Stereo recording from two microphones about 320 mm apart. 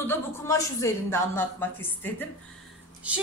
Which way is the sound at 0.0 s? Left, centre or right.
Centre.